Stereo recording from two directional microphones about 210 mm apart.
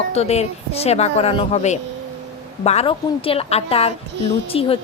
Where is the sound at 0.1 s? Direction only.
30° left (ahead or behind).